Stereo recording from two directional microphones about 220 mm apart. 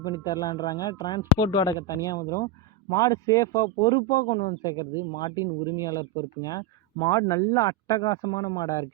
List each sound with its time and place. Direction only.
0.0 s a man's voice: 20° left (ahead or behind)